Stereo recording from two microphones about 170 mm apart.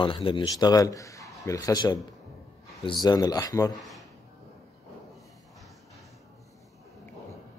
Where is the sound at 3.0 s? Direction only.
20° left (ahead or behind).